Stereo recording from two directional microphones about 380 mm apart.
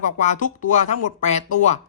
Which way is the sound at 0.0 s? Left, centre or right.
Centre.